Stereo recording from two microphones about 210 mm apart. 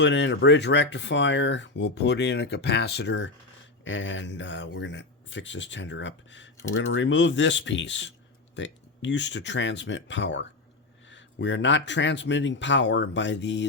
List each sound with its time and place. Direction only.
0.0 s speech: 55° left (ahead or behind)